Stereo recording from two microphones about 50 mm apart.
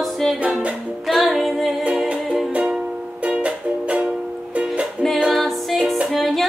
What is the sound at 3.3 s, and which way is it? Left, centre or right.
Music, right.